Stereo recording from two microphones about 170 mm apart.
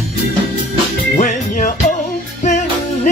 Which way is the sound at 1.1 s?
50° left (ahead or behind).